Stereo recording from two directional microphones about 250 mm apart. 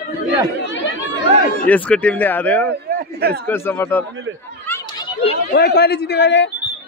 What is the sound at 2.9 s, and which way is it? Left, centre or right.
Speech, right.